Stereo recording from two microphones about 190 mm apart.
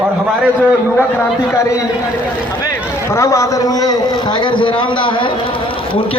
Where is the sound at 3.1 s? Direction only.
15° left (ahead or behind).